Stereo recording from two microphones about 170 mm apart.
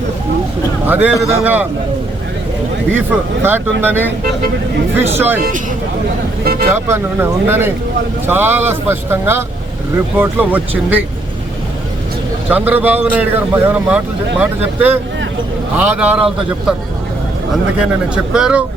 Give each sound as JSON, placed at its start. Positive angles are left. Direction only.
{"t": 0.9, "sound": "a man's voice", "side_deg": -10}
{"t": 3.4, "sound": "a man's voice", "side_deg": -10}
{"t": 5.1, "sound": "a man's voice", "side_deg": -10}
{"t": 6.4, "sound": "speech", "side_deg": -65}
{"t": 6.7, "sound": "a man's voice", "side_deg": -15}
{"t": 12.5, "sound": "a man's voice", "side_deg": -10}
{"t": 17.5, "sound": "speech", "side_deg": -5}